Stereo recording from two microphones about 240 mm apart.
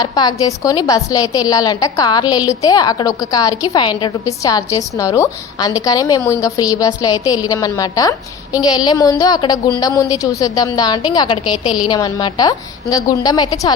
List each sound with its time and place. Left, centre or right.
0.0 s a woman's voice: centre